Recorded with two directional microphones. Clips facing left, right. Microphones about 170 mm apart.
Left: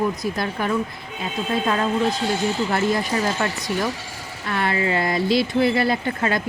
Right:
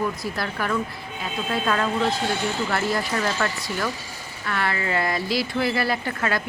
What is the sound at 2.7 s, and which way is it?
Speech, 20° left (ahead or behind).